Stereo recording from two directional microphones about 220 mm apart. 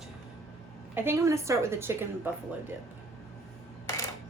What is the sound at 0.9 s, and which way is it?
A woman's voice, 10° right (ahead or behind).